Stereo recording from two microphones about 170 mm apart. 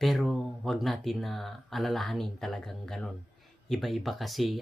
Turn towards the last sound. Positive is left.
turn(degrees=0)  # may be behind; listen again after turning